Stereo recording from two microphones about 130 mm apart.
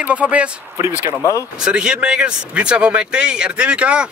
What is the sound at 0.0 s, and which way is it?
Speech, 10° right (ahead or behind).